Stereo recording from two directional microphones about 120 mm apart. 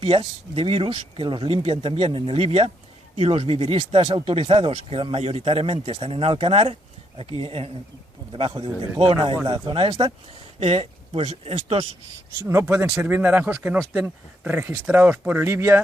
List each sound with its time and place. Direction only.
0.0 s speech: 55° right (ahead or behind)
10.6 s speech: 55° right (ahead or behind)
12.5 s speech: 20° right (ahead or behind)